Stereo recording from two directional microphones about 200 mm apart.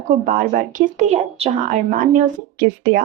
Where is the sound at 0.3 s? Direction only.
45° right (ahead or behind).